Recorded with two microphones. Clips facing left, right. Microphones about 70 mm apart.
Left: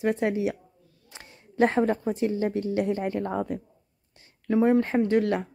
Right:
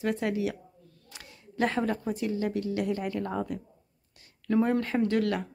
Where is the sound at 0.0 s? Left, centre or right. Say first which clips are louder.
Left 4 dB; left.